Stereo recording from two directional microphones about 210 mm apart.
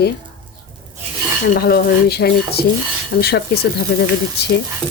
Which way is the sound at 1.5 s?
50° left (ahead or behind).